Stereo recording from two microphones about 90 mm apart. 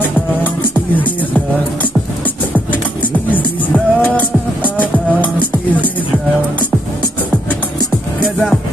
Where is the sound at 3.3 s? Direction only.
20° left (ahead or behind).